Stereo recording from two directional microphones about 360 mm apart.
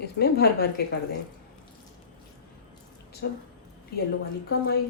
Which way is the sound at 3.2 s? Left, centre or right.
Left.